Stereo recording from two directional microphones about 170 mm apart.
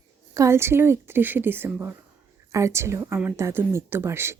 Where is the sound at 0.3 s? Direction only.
15° right (ahead or behind).